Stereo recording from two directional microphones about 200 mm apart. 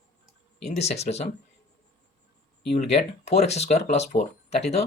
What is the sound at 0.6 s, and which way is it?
Speech, 35° left (ahead or behind).